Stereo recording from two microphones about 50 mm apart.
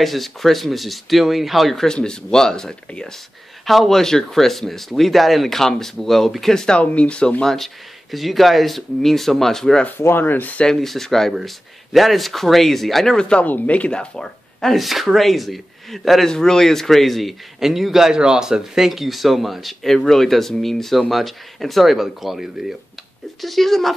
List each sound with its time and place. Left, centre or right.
0.0 s a man's voice: centre
1.9 s speech: centre
3.6 s a man's voice: centre
6.8 s speech: left
7.4 s a man's voice: centre
9.8 s speech: left
10.6 s a man's voice: centre
14.8 s a man's voice: centre
23.4 s a man's voice: centre